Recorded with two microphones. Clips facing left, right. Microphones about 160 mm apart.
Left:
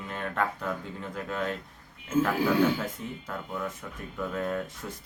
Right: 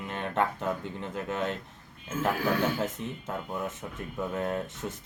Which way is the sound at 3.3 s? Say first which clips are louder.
Right 1 dB; 25° right (ahead or behind).